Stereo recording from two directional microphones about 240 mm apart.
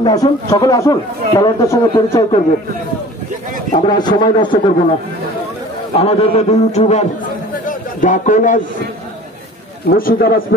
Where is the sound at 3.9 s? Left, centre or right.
Centre.